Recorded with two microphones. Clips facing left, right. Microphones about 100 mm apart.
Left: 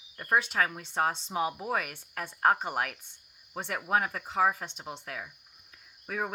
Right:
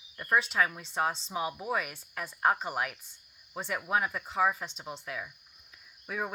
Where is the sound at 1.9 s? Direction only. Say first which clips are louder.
Left 1 dB; 60° left (ahead or behind).